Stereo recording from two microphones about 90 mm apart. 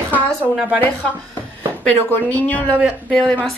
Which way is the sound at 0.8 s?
20° left (ahead or behind).